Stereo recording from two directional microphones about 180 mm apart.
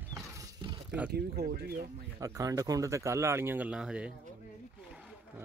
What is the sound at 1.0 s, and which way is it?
Speech, 65° right (ahead or behind).